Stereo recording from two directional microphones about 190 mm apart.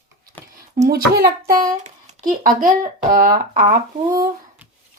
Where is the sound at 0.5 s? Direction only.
50° right (ahead or behind).